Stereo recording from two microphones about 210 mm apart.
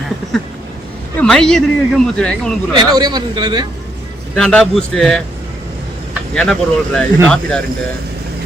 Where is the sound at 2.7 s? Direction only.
20° right (ahead or behind).